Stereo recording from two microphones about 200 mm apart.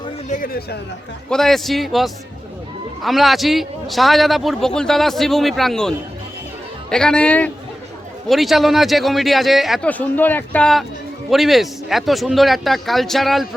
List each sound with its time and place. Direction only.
0.3 s speech: 45° left (ahead or behind)
1.3 s a man's voice: centre (ahead or behind)
6.9 s a man's voice: 5° left (ahead or behind)